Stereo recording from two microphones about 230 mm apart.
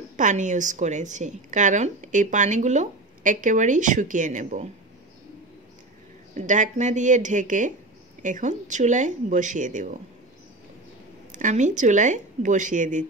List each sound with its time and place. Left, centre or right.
0.2 s a woman's voice: right
6.3 s a woman's voice: right
11.3 s a woman's voice: right